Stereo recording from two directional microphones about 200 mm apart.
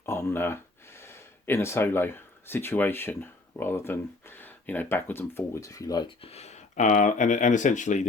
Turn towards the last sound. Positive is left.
turn(degrees=35)  # may be behind; listen again after turning